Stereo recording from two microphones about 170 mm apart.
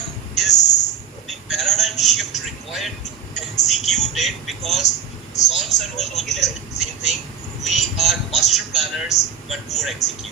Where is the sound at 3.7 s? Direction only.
Centre (ahead or behind).